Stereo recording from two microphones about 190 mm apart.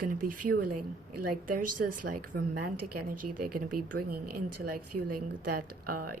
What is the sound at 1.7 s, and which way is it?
Speech, 50° right (ahead or behind).